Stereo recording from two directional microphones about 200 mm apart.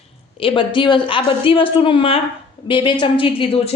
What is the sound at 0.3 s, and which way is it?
A man's voice, 25° left (ahead or behind).